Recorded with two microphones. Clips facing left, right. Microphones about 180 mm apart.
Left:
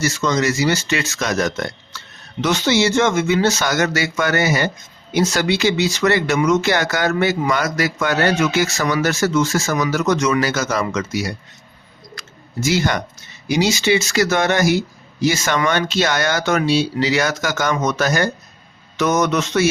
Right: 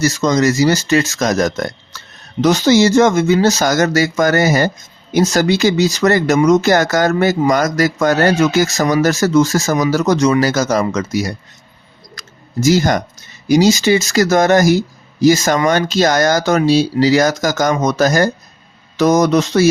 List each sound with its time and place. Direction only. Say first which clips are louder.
0.0 s speech: right 5 dB; 40° right (ahead or behind)
12.1 s a sound: right 6 dB; 40° right (ahead or behind)
13.5 s speech: right 6 dB; 40° right (ahead or behind)